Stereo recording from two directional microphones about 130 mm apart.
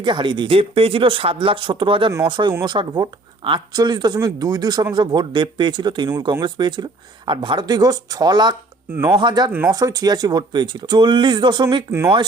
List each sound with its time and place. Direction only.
0.0 s speech: 35° right (ahead or behind)
8.9 s speech: 20° right (ahead or behind)
9.1 s speech: 35° right (ahead or behind)
9.5 s speech: 15° right (ahead or behind)
9.7 s speech: 30° right (ahead or behind)
11.9 s speech: 20° right (ahead or behind)